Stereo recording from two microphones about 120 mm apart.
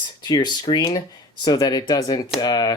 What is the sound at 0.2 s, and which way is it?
Speech, 35° left (ahead or behind).